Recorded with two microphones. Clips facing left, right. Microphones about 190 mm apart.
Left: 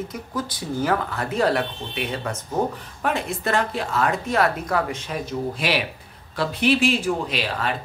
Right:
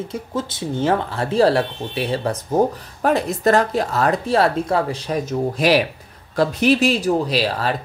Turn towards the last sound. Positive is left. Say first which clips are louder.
# right 5 dB
turn(degrees=-35)  # may be behind; listen again after turning